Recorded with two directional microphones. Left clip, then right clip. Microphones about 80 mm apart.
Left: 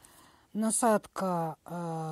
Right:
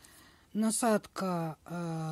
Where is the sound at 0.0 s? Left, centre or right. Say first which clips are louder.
Even; left.